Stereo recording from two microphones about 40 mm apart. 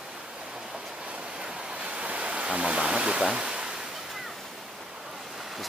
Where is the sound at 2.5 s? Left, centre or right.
Right.